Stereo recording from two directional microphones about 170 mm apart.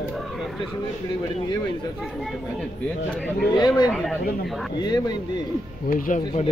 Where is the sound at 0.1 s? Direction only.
Centre (ahead or behind).